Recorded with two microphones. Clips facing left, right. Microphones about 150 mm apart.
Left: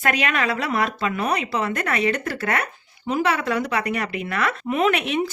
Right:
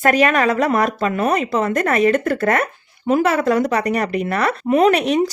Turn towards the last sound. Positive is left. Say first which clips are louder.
# right 6 dB
turn(degrees=-40)  # may be behind; listen again after turning